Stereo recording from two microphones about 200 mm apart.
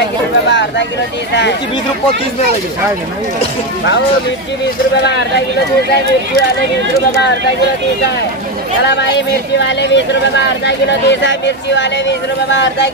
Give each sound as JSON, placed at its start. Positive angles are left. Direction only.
{"t": 0.5, "sound": "speech", "side_deg": 60}
{"t": 9.6, "sound": "speech", "side_deg": 60}